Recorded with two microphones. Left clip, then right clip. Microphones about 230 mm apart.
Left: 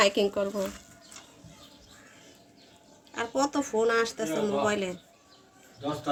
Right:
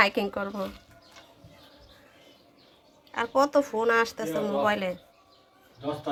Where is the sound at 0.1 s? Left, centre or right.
Centre.